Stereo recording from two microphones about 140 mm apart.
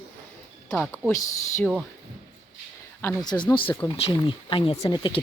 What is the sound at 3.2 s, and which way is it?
Speech, 30° left (ahead or behind).